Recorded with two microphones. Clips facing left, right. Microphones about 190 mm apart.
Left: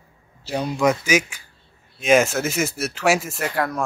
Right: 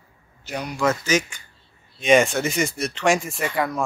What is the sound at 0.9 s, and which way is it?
A man's voice, 10° left (ahead or behind).